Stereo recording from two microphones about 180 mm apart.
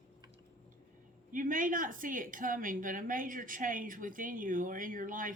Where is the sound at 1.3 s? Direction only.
50° right (ahead or behind).